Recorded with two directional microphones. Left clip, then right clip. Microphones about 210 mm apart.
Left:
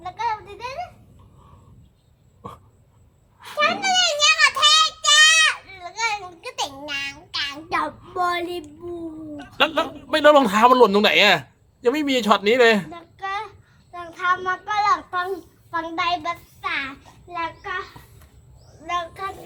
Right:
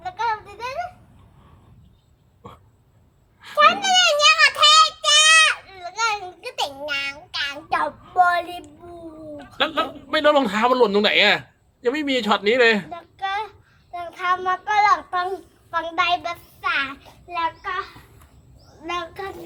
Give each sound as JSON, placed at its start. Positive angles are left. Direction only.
{"t": 0.0, "sound": "a sound", "side_deg": -10}
{"t": 3.6, "sound": "child singing", "side_deg": -15}
{"t": 9.6, "sound": "a man's voice", "side_deg": 30}
{"t": 12.9, "sound": "child singing", "side_deg": -5}
{"t": 15.7, "sound": "a child's voice", "side_deg": -10}
{"t": 18.9, "sound": "a child's voice", "side_deg": -15}